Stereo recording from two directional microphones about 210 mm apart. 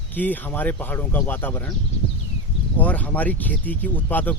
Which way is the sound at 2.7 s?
5° left (ahead or behind).